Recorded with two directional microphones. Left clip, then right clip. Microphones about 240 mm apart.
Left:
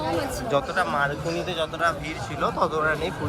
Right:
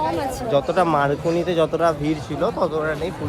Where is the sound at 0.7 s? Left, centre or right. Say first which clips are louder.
Right 6 dB; right.